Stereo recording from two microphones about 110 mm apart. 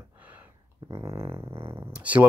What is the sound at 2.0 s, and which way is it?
Speech, 15° right (ahead or behind).